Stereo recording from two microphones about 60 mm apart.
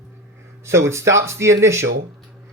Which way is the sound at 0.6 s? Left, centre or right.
Right.